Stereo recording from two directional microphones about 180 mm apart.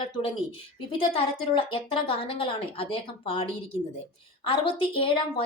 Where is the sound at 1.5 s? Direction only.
30° left (ahead or behind).